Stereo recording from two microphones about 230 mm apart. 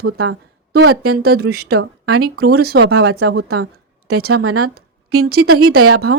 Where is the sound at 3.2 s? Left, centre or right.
Right.